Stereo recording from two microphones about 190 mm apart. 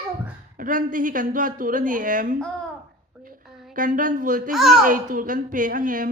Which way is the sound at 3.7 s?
45° right (ahead or behind).